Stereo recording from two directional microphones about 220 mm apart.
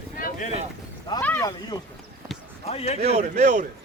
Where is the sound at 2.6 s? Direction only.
25° left (ahead or behind).